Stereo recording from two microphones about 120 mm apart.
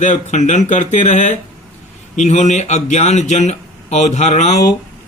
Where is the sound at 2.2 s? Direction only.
75° left (ahead or behind).